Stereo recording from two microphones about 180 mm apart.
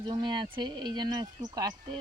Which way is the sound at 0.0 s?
25° right (ahead or behind).